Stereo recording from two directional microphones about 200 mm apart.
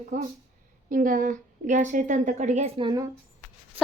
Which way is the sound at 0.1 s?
40° right (ahead or behind).